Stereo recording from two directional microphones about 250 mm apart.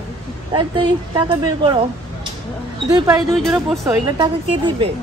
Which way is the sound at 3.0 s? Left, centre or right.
Centre.